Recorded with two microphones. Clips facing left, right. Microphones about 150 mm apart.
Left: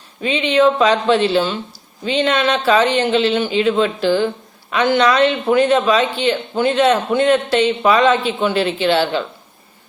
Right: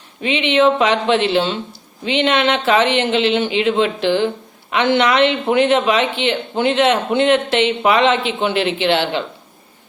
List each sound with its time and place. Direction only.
0.2 s a man's voice: 20° right (ahead or behind)